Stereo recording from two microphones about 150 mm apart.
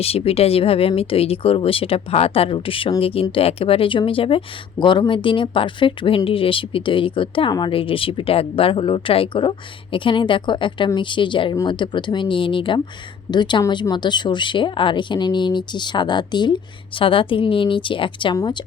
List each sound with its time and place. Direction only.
0.0 s speech: 40° left (ahead or behind)